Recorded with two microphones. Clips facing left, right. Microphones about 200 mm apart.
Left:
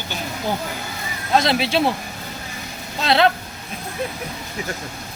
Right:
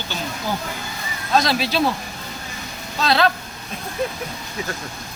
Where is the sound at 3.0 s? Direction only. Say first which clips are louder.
Left 2 dB; 25° left (ahead or behind).